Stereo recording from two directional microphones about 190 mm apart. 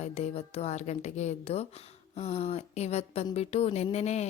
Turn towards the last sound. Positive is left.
turn(degrees=35)  # may be behind; listen again after turning